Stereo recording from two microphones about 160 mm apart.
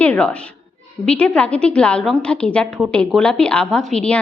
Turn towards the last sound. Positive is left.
turn(degrees=5)  # may be behind; listen again after turning